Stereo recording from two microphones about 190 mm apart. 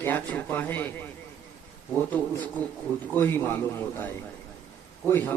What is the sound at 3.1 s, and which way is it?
Speech, 10° left (ahead or behind).